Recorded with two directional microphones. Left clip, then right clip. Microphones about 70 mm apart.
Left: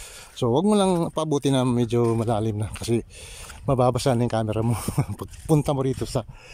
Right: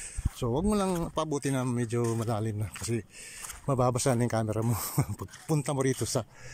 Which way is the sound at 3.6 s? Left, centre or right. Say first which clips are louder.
Left 6 dB; left.